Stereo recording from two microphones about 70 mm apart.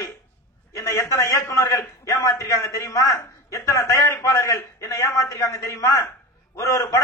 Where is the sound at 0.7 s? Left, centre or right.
Left.